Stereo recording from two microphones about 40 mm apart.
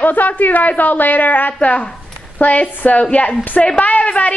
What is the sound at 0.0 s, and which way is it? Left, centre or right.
A man's voice, left.